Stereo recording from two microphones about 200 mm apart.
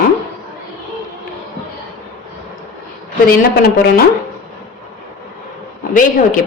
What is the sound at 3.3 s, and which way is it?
Speech, 50° left (ahead or behind).